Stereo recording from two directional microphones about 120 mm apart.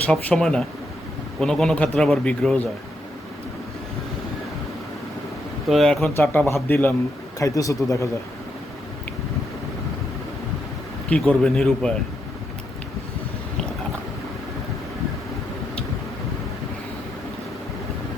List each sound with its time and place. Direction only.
0.0 s a man's voice: 10° left (ahead or behind)
5.6 s a man's voice: centre (ahead or behind)
6.3 s speech: 20° left (ahead or behind)
7.3 s speech: 30° left (ahead or behind)
11.1 s speech: 10° left (ahead or behind)